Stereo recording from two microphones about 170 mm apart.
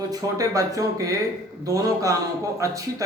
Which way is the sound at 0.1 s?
20° right (ahead or behind).